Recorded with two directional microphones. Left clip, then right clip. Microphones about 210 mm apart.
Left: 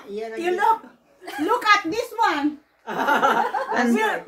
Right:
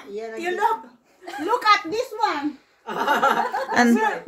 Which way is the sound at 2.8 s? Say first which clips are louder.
Left 1 dB; 30° right (ahead or behind).